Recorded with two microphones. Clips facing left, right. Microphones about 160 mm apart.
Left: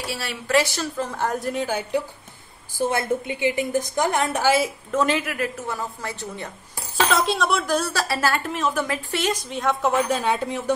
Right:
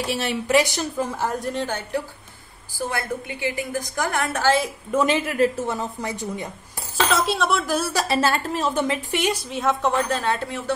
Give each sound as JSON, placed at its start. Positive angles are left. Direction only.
{"t": 0.0, "sound": "a woman's voice", "side_deg": -20}
{"t": 2.9, "sound": "a woman's voice", "side_deg": 20}
{"t": 4.9, "sound": "a woman's voice", "side_deg": -20}
{"t": 7.1, "sound": "a woman's voice", "side_deg": 0}
{"t": 7.9, "sound": "speech", "side_deg": -20}
{"t": 8.5, "sound": "a woman's voice", "side_deg": -35}
{"t": 8.7, "sound": "speech", "side_deg": -20}
{"t": 9.5, "sound": "a woman's voice", "side_deg": 0}
{"t": 9.9, "sound": "speech", "side_deg": 10}